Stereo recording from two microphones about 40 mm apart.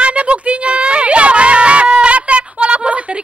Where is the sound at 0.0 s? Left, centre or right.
Right.